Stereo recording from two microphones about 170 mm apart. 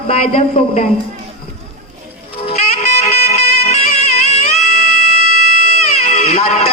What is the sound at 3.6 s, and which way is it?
Bagpipes, 40° left (ahead or behind).